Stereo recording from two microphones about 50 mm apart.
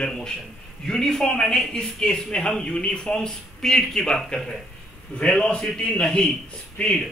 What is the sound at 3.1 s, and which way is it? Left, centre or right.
Speech, centre.